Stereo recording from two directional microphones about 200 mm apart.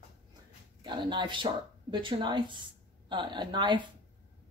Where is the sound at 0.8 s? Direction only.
25° right (ahead or behind).